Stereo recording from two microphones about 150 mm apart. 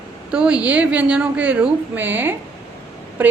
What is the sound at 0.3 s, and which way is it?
A woman's voice, 5° right (ahead or behind).